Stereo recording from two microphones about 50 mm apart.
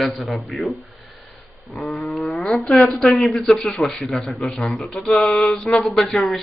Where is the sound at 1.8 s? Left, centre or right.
Centre.